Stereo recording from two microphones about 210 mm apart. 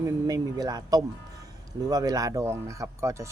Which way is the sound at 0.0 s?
15° right (ahead or behind).